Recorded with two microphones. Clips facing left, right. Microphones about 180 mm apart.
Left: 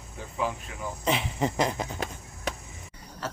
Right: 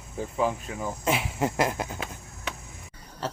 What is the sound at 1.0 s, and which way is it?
Speech, 5° right (ahead or behind).